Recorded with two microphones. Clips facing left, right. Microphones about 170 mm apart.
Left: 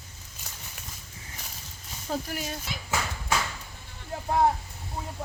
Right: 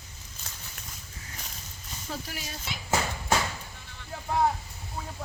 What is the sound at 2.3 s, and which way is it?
Speech, 50° left (ahead or behind).